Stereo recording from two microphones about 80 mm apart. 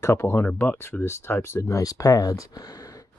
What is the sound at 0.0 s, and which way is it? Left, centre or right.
Speech, left.